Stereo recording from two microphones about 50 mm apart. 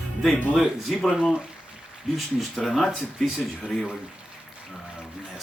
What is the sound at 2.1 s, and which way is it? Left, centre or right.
Speech, centre.